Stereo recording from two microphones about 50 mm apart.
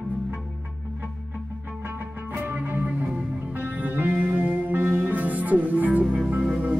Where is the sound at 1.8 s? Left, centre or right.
Right.